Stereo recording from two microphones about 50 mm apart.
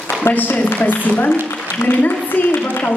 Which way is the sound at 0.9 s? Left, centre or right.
Left.